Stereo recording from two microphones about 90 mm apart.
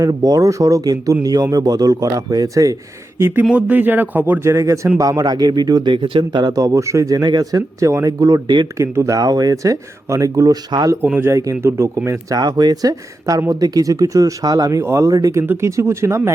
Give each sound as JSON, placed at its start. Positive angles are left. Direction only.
{"t": 0.0, "sound": "speech", "side_deg": -40}
{"t": 3.2, "sound": "speech", "side_deg": -25}
{"t": 5.9, "sound": "speech", "side_deg": -65}
{"t": 6.4, "sound": "speech", "side_deg": -40}
{"t": 8.8, "sound": "speech", "side_deg": -35}
{"t": 11.0, "sound": "speech", "side_deg": -20}
{"t": 11.3, "sound": "speech", "side_deg": -35}
{"t": 11.8, "sound": "speech", "side_deg": -25}
{"t": 12.3, "sound": "speech", "side_deg": -50}
{"t": 14.8, "sound": "speech", "side_deg": -30}